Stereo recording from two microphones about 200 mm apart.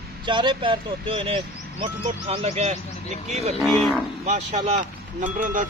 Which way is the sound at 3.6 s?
Centre (ahead or behind).